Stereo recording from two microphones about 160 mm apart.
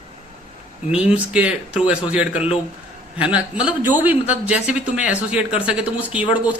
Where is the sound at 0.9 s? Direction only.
5° right (ahead or behind).